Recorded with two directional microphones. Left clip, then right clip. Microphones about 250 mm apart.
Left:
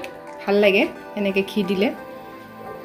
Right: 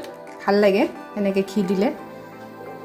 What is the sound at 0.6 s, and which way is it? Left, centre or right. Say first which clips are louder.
Speech: left 3 dB; right.